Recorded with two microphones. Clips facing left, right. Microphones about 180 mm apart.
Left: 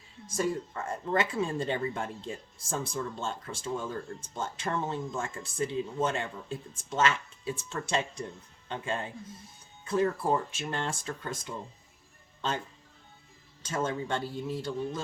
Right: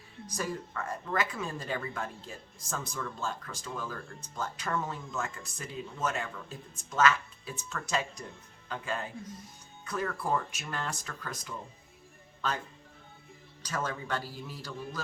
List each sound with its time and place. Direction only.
0.3 s speech: 25° left (ahead or behind)
13.6 s speech: 25° left (ahead or behind)